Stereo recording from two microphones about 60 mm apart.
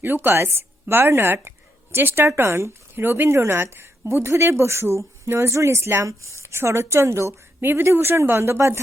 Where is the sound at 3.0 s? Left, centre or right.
Right.